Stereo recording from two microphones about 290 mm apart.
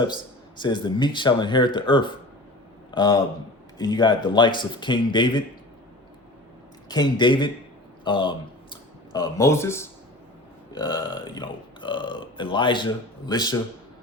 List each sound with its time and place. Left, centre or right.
0.6 s speech: centre
6.8 s speech: centre